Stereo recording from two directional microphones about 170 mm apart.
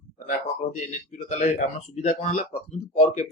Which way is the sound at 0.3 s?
50° left (ahead or behind).